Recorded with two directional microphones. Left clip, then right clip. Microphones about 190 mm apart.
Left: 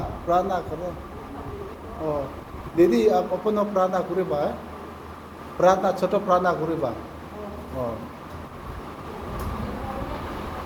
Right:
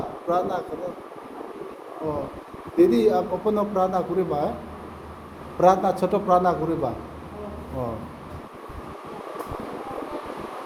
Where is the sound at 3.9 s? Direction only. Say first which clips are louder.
Even; 20° right (ahead or behind).